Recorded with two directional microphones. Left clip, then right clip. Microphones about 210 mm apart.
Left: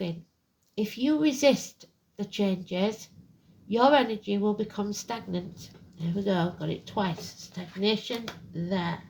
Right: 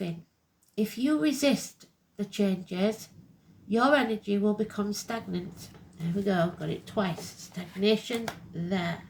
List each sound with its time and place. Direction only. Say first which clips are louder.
0.8 s a woman's voice: left 1 dB; 30° left (ahead or behind)